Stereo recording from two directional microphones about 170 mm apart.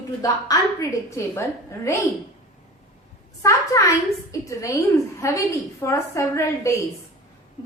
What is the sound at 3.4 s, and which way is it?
A woman's voice, 20° left (ahead or behind).